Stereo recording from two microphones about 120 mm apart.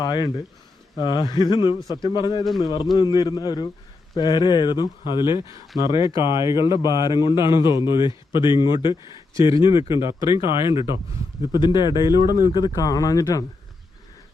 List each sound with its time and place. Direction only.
0.0 s a man's voice: 35° left (ahead or behind)
2.4 s a man's voice: centre (ahead or behind)
2.9 s a man's voice: 35° left (ahead or behind)
12.1 s speech: 30° right (ahead or behind)
12.5 s a man's voice: 40° left (ahead or behind)